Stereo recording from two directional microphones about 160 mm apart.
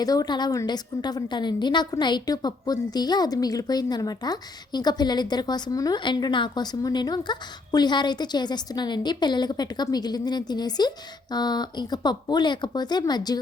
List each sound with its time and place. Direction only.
0.0 s a woman's voice: 25° left (ahead or behind)